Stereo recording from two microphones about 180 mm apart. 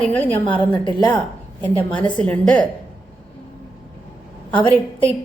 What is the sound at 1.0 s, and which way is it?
A woman's voice, 10° left (ahead or behind).